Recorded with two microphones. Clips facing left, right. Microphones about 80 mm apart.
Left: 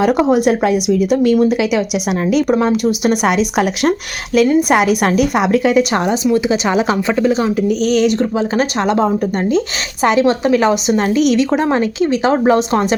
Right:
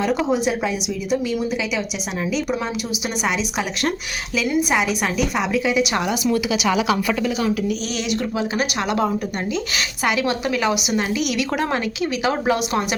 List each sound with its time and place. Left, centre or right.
0.0 s speech: left
2.2 s speech: left
6.3 s a woman's voice: left
7.7 s a woman's voice: left